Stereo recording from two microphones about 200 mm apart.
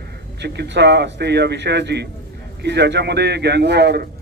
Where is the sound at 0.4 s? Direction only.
60° right (ahead or behind).